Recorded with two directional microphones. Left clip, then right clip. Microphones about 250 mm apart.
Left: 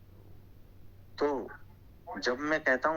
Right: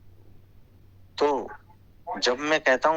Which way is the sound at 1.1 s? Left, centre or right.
Right.